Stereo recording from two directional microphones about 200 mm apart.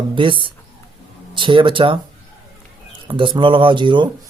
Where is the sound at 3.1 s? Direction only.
25° right (ahead or behind).